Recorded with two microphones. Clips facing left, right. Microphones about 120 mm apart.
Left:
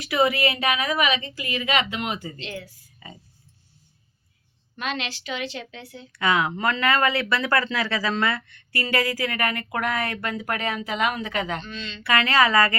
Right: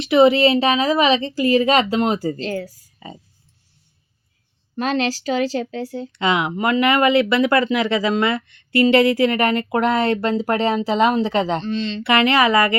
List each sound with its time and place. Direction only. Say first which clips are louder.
0.0 s a woman's voice: right 9 dB; 25° right (ahead or behind); by 2.8 s 40° right (ahead or behind)
4.8 s a woman's voice: right 10 dB; 35° right (ahead or behind)
6.1 s speech: right 3 dB; 20° right (ahead or behind)